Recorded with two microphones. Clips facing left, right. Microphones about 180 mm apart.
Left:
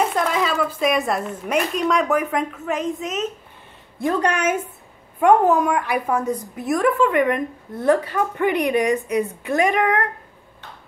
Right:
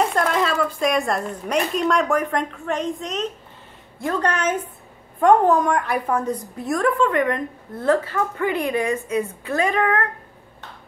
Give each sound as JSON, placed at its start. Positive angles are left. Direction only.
{"t": 0.0, "sound": "a woman's voice", "side_deg": 0}
{"t": 4.0, "sound": "a woman's voice", "side_deg": 15}